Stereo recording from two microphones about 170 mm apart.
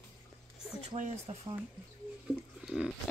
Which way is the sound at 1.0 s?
40° right (ahead or behind).